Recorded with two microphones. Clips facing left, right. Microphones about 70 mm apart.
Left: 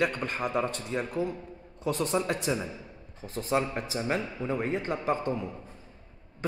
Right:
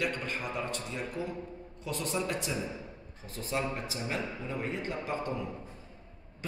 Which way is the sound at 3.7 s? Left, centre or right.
Left.